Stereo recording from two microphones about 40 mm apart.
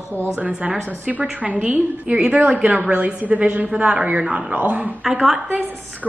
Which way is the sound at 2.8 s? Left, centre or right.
Right.